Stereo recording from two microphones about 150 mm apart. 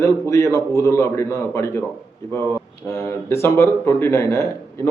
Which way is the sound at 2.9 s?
20° left (ahead or behind).